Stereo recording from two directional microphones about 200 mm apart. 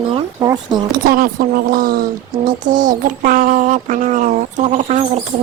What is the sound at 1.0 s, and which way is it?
A woman's voice, 50° right (ahead or behind).